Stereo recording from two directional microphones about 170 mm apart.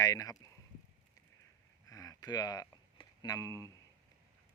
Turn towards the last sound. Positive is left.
turn(degrees=20)  # may be behind; listen again after turning